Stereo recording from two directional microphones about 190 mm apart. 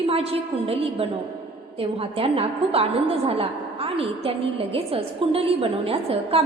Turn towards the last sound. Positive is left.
turn(degrees=-30)  # may be behind; listen again after turning